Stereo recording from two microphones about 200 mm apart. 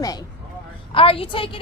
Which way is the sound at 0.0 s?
20° left (ahead or behind).